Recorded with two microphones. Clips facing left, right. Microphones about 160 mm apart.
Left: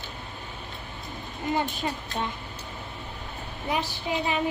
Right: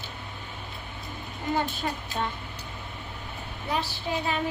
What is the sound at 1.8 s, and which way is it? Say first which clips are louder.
Speech: left 1 dB; 15° left (ahead or behind).